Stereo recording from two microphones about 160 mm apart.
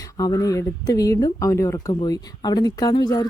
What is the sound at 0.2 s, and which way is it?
A woman's voice, 25° left (ahead or behind).